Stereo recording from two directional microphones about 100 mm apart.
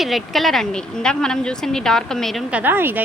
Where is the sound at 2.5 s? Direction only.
20° right (ahead or behind).